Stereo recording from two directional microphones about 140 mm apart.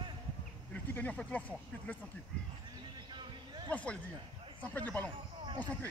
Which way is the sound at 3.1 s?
35° right (ahead or behind).